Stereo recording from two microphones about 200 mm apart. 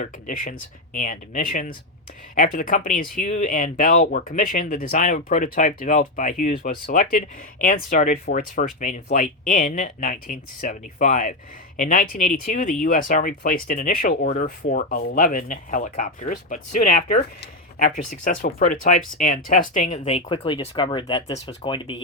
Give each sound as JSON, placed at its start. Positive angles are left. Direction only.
{"t": 0.0, "sound": "speech", "side_deg": 45}